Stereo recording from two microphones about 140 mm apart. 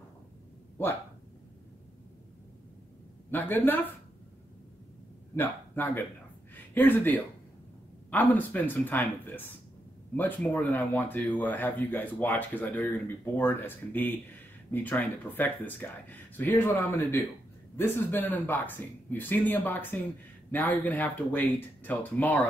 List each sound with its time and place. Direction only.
3.3 s speech: 15° left (ahead or behind)
5.3 s speech: 15° left (ahead or behind)